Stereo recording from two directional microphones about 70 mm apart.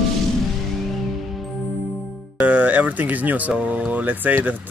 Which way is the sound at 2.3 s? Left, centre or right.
Right.